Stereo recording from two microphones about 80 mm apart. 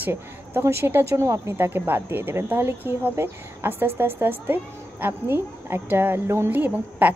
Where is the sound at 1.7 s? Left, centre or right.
Right.